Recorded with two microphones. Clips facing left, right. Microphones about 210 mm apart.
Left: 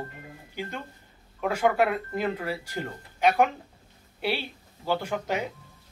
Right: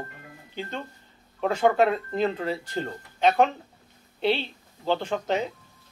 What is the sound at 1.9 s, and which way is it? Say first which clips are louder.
Speech: right 3 dB; 25° right (ahead or behind).